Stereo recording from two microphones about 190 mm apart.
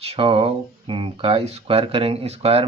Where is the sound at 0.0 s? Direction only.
30° right (ahead or behind).